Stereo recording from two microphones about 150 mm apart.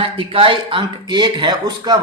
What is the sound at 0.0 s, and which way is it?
Speech, 35° right (ahead or behind).